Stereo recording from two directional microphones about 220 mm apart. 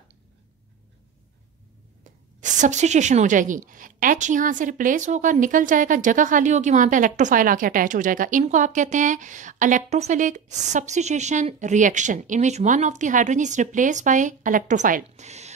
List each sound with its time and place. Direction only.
2.0 s a woman's voice: 35° right (ahead or behind)